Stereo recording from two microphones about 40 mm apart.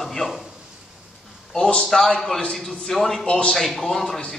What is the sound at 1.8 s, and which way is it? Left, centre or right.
Speech, centre.